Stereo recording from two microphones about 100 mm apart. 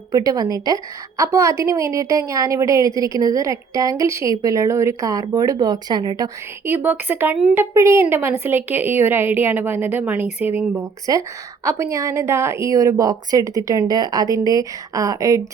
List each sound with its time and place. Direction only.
0.1 s a woman's voice: 40° right (ahead or behind)
6.7 s a woman's voice: 20° right (ahead or behind)
10.8 s a woman's voice: 35° right (ahead or behind)